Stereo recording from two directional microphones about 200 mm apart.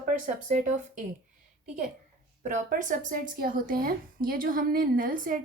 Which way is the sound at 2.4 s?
40° right (ahead or behind).